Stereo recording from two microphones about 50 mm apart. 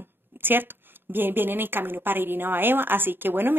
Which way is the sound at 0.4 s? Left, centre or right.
Right.